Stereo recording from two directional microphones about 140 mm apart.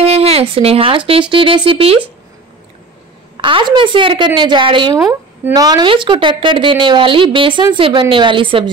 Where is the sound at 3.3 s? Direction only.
35° right (ahead or behind).